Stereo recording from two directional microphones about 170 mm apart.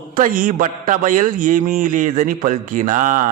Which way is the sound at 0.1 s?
55° right (ahead or behind).